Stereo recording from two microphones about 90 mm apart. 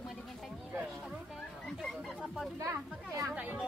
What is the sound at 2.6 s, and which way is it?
Speech, 35° right (ahead or behind).